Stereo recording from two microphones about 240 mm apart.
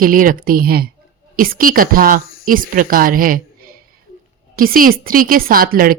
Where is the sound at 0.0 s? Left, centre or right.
Right.